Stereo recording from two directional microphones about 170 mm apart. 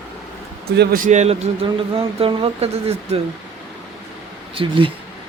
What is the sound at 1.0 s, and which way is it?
Speech, 40° right (ahead or behind).